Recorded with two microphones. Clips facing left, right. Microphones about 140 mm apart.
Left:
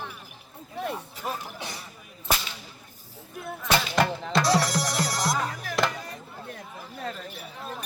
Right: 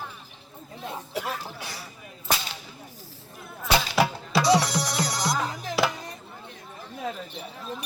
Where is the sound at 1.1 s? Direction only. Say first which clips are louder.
Right 2 dB; 75° right (ahead or behind).